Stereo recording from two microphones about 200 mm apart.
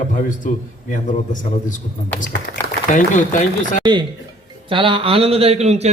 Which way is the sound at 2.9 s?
40° left (ahead or behind).